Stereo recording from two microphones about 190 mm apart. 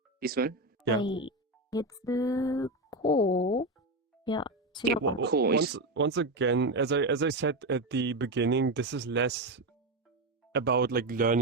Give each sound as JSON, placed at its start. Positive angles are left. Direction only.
{"t": 0.2, "sound": "speech", "side_deg": -55}
{"t": 1.0, "sound": "speech", "side_deg": 25}
{"t": 4.2, "sound": "music", "side_deg": 25}
{"t": 4.9, "sound": "speech", "side_deg": -65}